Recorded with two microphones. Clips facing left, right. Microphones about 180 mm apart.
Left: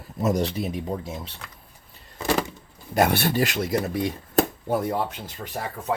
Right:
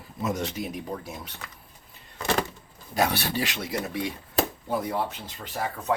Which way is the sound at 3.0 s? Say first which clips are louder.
Left 5 dB; 50° left (ahead or behind).